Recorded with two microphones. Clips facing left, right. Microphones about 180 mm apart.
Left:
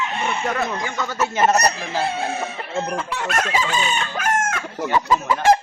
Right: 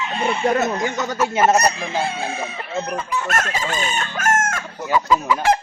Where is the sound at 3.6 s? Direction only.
45° right (ahead or behind).